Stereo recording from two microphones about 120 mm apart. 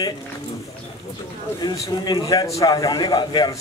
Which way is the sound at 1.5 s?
30° left (ahead or behind).